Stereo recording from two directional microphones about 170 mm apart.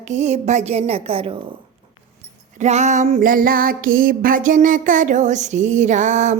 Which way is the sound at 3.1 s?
55° right (ahead or behind).